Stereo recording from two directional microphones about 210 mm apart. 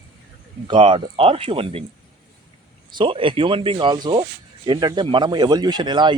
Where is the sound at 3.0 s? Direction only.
25° right (ahead or behind).